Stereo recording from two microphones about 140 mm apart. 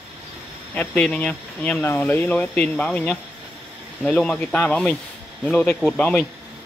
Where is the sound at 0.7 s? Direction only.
10° left (ahead or behind).